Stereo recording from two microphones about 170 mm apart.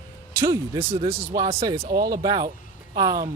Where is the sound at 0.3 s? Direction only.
20° right (ahead or behind).